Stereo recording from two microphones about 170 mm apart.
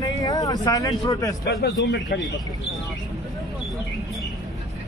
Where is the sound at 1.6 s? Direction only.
75° left (ahead or behind).